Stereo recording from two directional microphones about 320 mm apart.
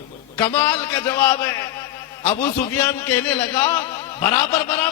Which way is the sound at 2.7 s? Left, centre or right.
Centre.